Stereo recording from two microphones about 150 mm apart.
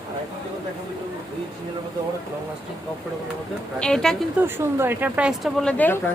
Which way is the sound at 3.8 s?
5° left (ahead or behind).